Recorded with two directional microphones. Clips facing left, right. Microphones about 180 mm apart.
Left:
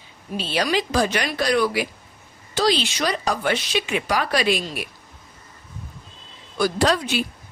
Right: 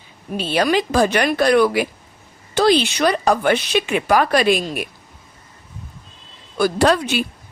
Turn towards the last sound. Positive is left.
turn(degrees=-55)  # may be behind; listen again after turning